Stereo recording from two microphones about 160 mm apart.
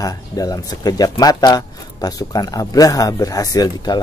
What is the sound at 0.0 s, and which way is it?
Speech, 25° left (ahead or behind).